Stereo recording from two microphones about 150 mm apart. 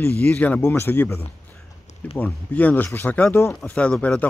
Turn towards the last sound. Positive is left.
turn(degrees=5)  # may be behind; listen again after turning